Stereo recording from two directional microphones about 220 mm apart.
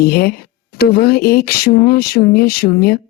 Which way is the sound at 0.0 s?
45° left (ahead or behind).